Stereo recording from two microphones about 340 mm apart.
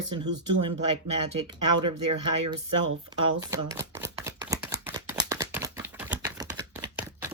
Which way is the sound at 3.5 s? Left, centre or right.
Centre.